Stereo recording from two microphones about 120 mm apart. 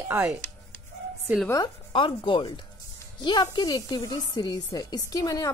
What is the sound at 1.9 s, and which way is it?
A woman's voice, 45° left (ahead or behind).